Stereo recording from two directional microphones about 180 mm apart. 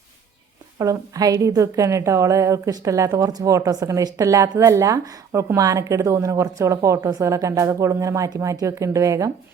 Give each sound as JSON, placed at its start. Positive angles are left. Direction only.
{"t": 0.8, "sound": "a woman's voice", "side_deg": -20}